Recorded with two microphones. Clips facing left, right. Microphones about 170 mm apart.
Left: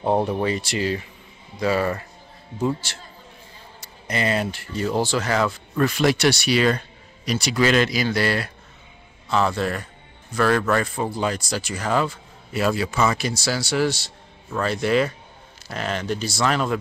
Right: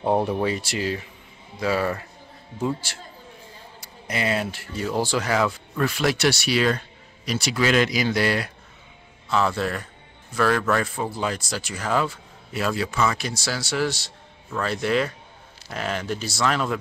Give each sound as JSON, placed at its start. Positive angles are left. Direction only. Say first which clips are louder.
{"t": 0.0, "sound": "speech", "louder": "left 1 dB", "side_deg": 10}
{"t": 0.4, "sound": "speech", "louder": "left 1 dB", "side_deg": -5}
{"t": 3.8, "sound": "speech", "louder": "left 2 dB", "side_deg": -5}
{"t": 7.9, "sound": "a man's voice", "louder": "even", "side_deg": -15}
{"t": 9.6, "sound": "speech", "louder": "left 2 dB", "side_deg": 0}